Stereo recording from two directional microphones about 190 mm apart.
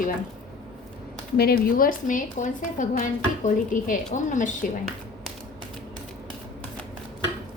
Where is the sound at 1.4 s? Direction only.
50° left (ahead or behind).